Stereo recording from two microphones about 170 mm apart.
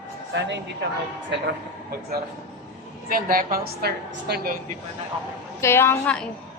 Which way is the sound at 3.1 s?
55° right (ahead or behind).